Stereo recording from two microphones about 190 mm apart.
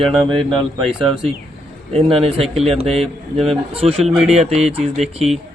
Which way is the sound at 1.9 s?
30° right (ahead or behind).